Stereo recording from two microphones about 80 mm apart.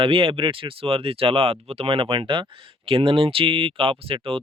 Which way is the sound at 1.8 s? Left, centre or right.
Right.